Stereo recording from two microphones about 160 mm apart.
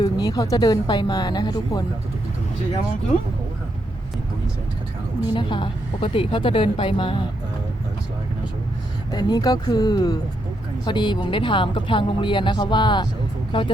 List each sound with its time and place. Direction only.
0.2 s speech: 20° left (ahead or behind)
5.3 s speech: 30° left (ahead or behind)
9.1 s speech: 25° left (ahead or behind)